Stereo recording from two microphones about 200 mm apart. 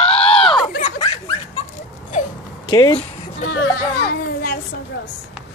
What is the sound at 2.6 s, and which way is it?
Speech, 20° left (ahead or behind).